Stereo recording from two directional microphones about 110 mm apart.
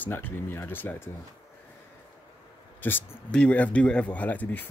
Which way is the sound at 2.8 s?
15° left (ahead or behind).